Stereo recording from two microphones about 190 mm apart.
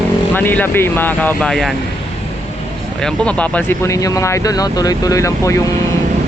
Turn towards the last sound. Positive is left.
turn(degrees=15)  # may be behind; listen again after turning